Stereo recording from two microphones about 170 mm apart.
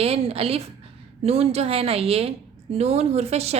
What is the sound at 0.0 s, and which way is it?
A woman's voice, 35° right (ahead or behind).